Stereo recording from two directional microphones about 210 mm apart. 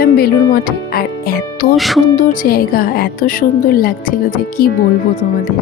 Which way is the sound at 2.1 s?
40° left (ahead or behind).